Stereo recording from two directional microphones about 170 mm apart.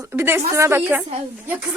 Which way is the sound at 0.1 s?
15° right (ahead or behind).